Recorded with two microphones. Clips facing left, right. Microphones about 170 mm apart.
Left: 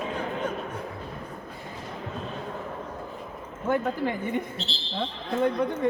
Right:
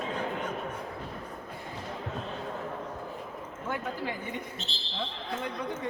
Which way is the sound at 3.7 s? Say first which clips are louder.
Left 8 dB; 55° left (ahead or behind).